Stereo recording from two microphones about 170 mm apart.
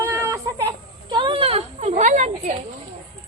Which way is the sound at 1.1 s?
30° right (ahead or behind).